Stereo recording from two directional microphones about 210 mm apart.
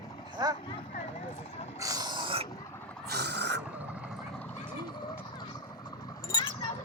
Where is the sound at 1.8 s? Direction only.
15° right (ahead or behind).